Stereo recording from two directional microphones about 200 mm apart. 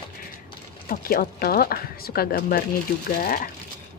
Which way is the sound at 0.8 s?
45° left (ahead or behind).